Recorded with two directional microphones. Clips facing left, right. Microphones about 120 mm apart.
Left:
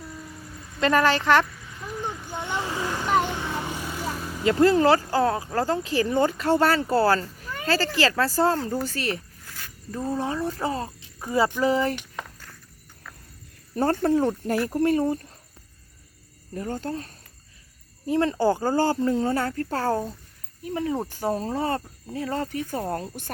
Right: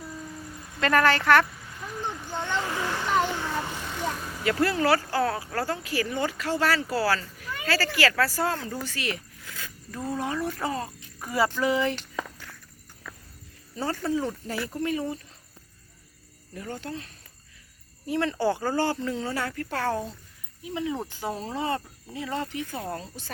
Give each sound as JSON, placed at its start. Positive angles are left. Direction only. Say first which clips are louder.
{"t": 0.8, "sound": "speech", "louder": "left 1 dB", "side_deg": 20}
{"t": 1.8, "sound": "a sound", "louder": "left 2 dB", "side_deg": 10}
{"t": 2.2, "sound": "speech", "louder": "right 3 dB", "side_deg": 15}
{"t": 3.3, "sound": "vehicle", "louder": "left 1 dB", "side_deg": 15}
{"t": 4.4, "sound": "speech", "louder": "left 6 dB", "side_deg": 25}
{"t": 11.6, "sound": "speech", "louder": "left 2 dB", "side_deg": 40}
{"t": 11.9, "sound": "a sound", "louder": "right 2 dB", "side_deg": 5}
{"t": 14.0, "sound": "speech", "louder": "left 6 dB", "side_deg": 55}
{"t": 16.6, "sound": "speech", "louder": "left 5 dB", "side_deg": 40}
{"t": 23.0, "sound": "speech", "louder": "left 6 dB", "side_deg": 55}